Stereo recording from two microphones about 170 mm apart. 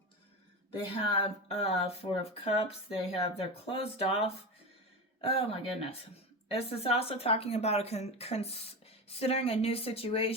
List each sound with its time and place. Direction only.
1.1 s speech: 35° left (ahead or behind)